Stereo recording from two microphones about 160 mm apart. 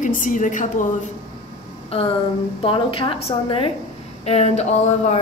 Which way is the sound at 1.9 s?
35° left (ahead or behind).